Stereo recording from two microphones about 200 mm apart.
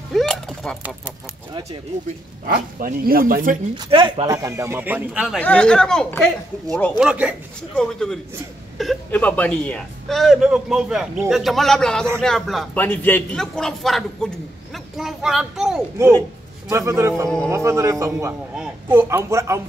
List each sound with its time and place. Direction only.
0.1 s a sound: centre (ahead or behind)
2.4 s speech: 45° right (ahead or behind)
3.7 s speech: 25° right (ahead or behind); by 5.4 s 5° right (ahead or behind)
5.4 s a man's voice: 5° left (ahead or behind)
16.6 s speech: 15° right (ahead or behind)